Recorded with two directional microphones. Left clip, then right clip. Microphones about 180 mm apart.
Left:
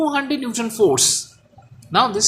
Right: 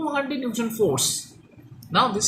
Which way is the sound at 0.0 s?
50° left (ahead or behind).